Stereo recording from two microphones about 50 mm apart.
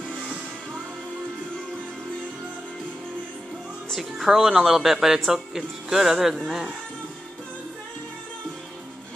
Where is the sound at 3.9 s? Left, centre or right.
Centre.